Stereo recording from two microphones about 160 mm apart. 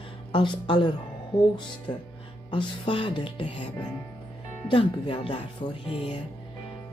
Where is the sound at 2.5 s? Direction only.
30° left (ahead or behind).